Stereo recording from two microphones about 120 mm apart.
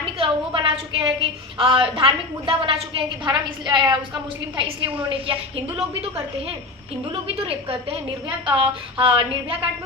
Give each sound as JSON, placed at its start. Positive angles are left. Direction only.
{"t": 0.0, "sound": "a woman's voice", "side_deg": -50}
{"t": 3.2, "sound": "a woman's voice", "side_deg": -35}
{"t": 7.1, "sound": "a woman's voice", "side_deg": -50}